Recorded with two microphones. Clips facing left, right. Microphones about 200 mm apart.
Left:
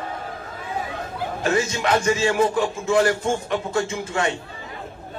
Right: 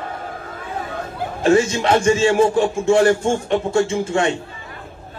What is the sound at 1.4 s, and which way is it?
Speech, 30° right (ahead or behind).